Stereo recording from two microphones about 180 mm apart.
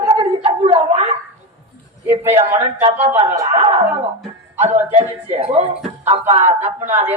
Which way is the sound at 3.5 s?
30° right (ahead or behind).